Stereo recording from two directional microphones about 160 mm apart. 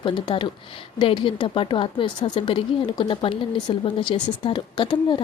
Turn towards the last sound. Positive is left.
turn(degrees=30)  # may be behind; listen again after turning